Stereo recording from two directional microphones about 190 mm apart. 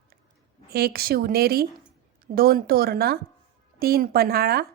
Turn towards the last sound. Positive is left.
turn(degrees=-55)  # may be behind; listen again after turning